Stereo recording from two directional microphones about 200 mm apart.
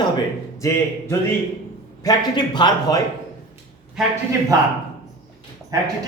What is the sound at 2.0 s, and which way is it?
A man's voice, 20° left (ahead or behind).